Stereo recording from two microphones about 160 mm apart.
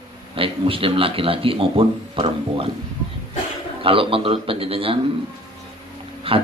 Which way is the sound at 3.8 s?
35° right (ahead or behind).